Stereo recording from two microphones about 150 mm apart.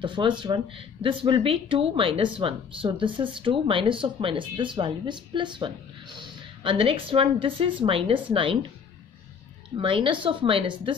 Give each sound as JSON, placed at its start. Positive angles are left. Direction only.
{"t": 0.0, "sound": "speech", "side_deg": -30}
{"t": 9.8, "sound": "speech", "side_deg": -35}